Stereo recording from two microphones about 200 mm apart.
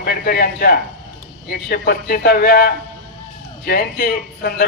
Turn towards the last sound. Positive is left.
turn(degrees=50)  # may be behind; listen again after turning